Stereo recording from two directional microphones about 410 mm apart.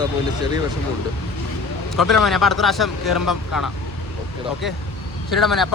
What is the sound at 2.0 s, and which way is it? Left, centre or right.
Speech, centre.